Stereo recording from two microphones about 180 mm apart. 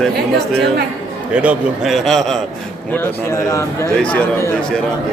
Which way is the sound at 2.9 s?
15° left (ahead or behind).